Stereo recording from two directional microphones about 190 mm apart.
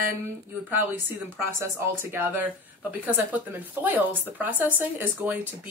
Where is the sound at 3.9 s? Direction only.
10° right (ahead or behind).